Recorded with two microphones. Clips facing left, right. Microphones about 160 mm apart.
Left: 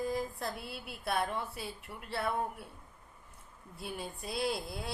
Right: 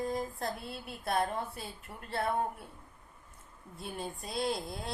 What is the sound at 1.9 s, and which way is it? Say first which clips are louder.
Speech: left 1 dB; 25° right (ahead or behind).